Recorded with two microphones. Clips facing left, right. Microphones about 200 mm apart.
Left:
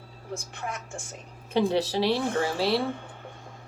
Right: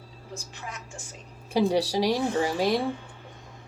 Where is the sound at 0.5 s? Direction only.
55° left (ahead or behind).